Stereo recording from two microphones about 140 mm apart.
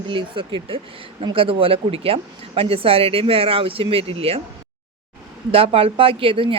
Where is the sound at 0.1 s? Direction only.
35° right (ahead or behind).